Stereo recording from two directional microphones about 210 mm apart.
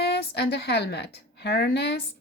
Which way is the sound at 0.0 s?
50° left (ahead or behind).